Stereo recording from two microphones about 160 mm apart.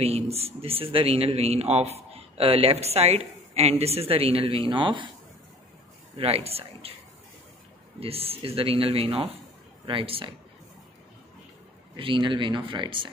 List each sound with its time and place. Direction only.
0.0 s speech: 40° right (ahead or behind)
6.1 s speech: 40° right (ahead or behind)
8.0 s speech: 35° right (ahead or behind)
12.0 s speech: 30° right (ahead or behind)